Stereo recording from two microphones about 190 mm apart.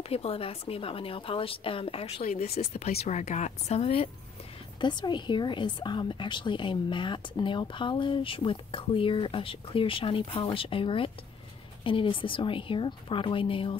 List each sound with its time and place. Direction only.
0.1 s a woman's voice: 30° left (ahead or behind)